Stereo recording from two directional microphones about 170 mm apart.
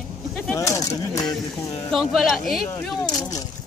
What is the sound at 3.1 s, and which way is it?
Speech, 20° left (ahead or behind).